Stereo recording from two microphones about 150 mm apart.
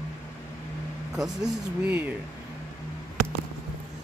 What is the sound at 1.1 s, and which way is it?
Speech, 5° right (ahead or behind).